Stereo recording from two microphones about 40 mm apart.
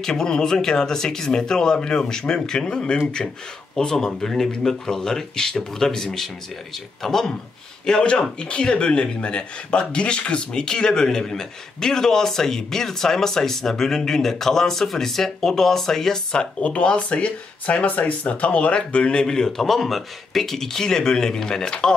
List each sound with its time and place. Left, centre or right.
0.0 s speech: centre
3.7 s speech: centre
7.8 s speech: left
16.6 s speech: left; by 19.6 s centre
19.6 s speech: centre